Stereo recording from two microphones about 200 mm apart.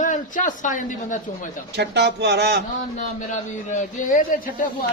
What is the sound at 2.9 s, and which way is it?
Speech, 40° left (ahead or behind).